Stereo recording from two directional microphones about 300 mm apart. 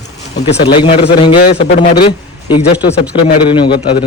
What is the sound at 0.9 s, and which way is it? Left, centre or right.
Speech, left.